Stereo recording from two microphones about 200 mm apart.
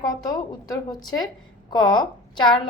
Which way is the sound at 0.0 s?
20° left (ahead or behind).